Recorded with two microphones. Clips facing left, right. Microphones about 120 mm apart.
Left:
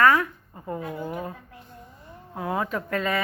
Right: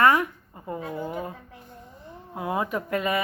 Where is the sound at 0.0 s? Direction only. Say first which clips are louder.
Even; 15° right (ahead or behind).